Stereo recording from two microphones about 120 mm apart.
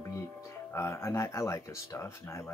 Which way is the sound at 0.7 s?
25° left (ahead or behind).